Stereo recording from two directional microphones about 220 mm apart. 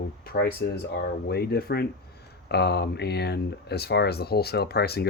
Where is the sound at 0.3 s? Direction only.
45° left (ahead or behind).